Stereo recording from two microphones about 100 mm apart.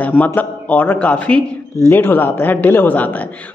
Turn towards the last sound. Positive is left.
turn(degrees=15)  # may be behind; listen again after turning